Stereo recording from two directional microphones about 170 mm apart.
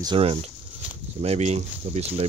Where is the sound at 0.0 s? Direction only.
30° right (ahead or behind).